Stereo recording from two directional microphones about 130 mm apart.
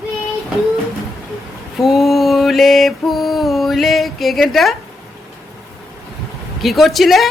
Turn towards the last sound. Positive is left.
turn(degrees=0)  # may be behind; listen again after turning